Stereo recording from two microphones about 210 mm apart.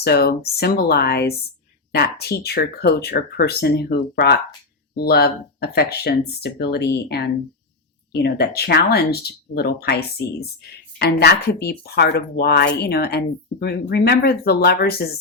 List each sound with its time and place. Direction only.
0.0 s speech: 50° left (ahead or behind)